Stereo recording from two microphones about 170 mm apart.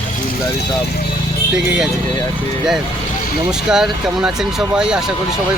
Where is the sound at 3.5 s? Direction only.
5° right (ahead or behind).